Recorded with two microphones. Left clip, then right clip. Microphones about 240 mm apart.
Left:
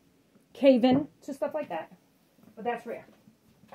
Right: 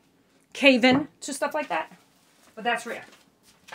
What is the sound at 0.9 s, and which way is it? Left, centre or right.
Speech, right.